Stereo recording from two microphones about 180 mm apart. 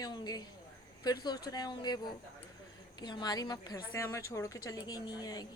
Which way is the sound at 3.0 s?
25° left (ahead or behind).